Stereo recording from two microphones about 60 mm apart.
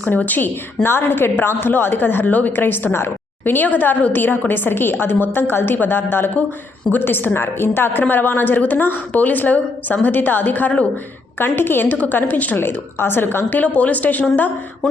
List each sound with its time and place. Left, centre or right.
0.0 s a woman's voice: left
11.3 s a woman's voice: left